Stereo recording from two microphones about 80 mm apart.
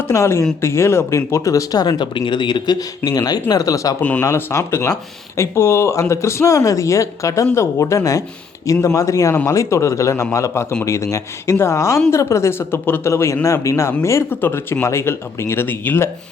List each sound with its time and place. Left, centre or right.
0.0 s speech: left
4.2 s speech: left